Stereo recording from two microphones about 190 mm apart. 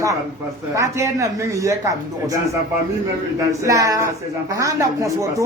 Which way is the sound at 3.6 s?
15° right (ahead or behind).